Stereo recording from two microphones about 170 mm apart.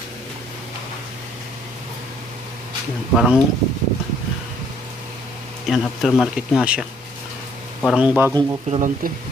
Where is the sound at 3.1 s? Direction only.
5° right (ahead or behind).